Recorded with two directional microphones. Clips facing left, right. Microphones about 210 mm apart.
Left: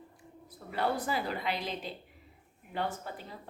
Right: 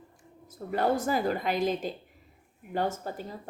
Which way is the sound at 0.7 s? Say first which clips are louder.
Right 5 dB; 45° right (ahead or behind).